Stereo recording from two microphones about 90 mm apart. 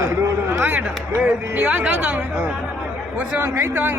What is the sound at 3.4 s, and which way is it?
Speech, 30° right (ahead or behind).